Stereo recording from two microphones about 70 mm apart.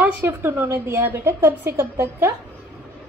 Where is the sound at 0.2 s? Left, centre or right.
Right.